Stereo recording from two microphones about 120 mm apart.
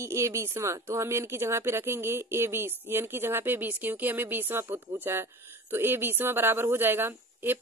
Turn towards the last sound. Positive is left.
turn(degrees=-20)  # may be behind; listen again after turning